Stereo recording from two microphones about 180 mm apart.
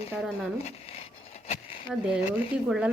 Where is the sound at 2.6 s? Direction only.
5° right (ahead or behind).